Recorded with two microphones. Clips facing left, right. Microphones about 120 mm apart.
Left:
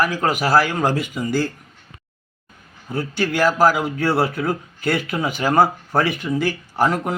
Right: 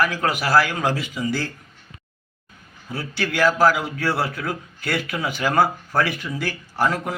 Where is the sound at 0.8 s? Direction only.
50° left (ahead or behind).